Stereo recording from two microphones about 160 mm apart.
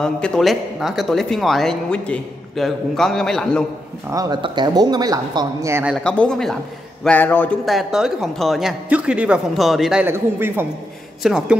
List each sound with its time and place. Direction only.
0.0 s speech: 5° left (ahead or behind)
4.1 s speech: 25° right (ahead or behind)
6.0 s a man's voice: 5° left (ahead or behind)
7.6 s speech: centre (ahead or behind)